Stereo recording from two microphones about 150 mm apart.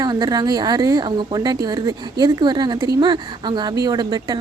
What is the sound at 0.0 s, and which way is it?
A woman's voice, 25° right (ahead or behind).